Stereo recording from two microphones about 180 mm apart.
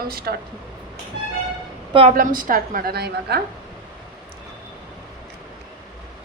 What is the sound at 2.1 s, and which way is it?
A woman's voice, 50° right (ahead or behind).